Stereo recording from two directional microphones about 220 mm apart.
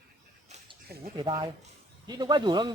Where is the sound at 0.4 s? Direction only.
30° right (ahead or behind).